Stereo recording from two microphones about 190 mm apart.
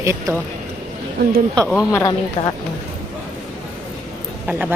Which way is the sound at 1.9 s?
20° left (ahead or behind).